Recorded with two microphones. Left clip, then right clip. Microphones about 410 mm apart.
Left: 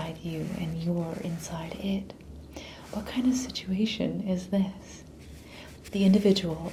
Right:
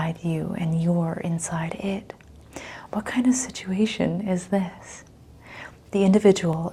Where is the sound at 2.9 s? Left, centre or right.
Right.